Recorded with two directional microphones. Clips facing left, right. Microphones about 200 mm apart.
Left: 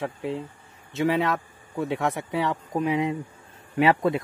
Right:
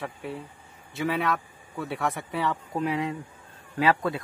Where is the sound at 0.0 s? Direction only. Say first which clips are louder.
Left 5 dB; 25° left (ahead or behind).